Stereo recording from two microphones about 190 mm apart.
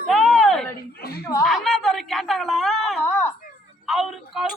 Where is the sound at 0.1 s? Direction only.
Centre (ahead or behind).